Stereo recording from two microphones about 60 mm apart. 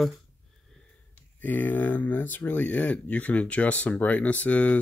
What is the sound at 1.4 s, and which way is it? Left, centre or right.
Speech, left.